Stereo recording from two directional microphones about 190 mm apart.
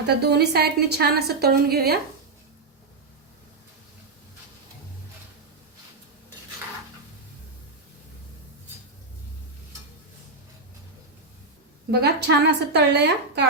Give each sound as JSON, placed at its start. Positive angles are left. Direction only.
{"t": 0.2, "sound": "a woman's voice", "side_deg": -60}
{"t": 11.9, "sound": "a woman's voice", "side_deg": -55}